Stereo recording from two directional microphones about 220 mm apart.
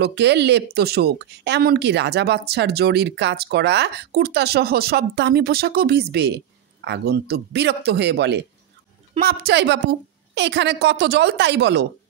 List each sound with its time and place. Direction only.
0.0 s speech: 50° right (ahead or behind)